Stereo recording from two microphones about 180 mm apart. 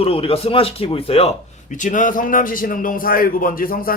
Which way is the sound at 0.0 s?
30° left (ahead or behind).